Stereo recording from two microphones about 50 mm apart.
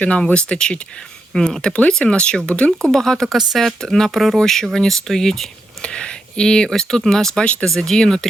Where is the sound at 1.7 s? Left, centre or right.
Left.